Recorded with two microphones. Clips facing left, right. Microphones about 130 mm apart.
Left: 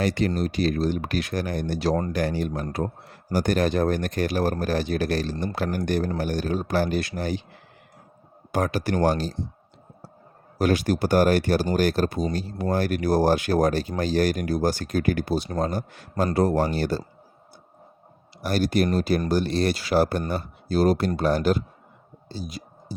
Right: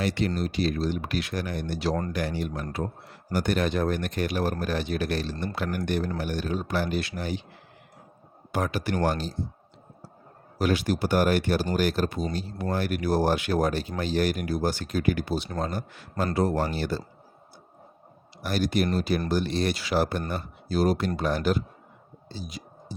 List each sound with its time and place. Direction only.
0.0 s speech: 45° left (ahead or behind)
8.5 s speech: 40° left (ahead or behind)
10.6 s speech: 45° left (ahead or behind)
18.4 s speech: 35° left (ahead or behind)
22.4 s a sound: 40° left (ahead or behind)